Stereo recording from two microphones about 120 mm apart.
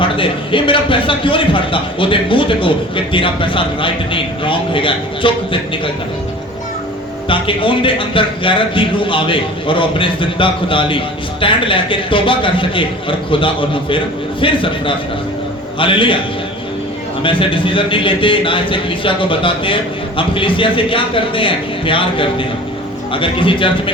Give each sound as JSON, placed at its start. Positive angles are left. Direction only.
{"t": 0.0, "sound": "a man's voice", "side_deg": 45}
{"t": 7.3, "sound": "a man's voice", "side_deg": 45}
{"t": 17.2, "sound": "a man's voice", "side_deg": 45}